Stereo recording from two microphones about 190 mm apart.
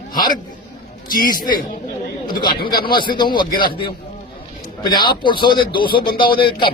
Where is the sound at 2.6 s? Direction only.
55° left (ahead or behind).